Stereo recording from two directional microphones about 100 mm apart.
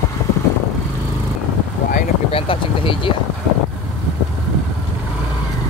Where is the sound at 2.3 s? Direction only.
60° left (ahead or behind).